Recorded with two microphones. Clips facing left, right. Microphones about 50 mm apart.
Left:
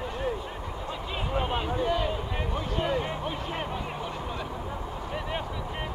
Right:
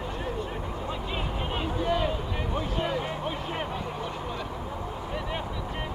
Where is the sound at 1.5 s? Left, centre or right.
Centre.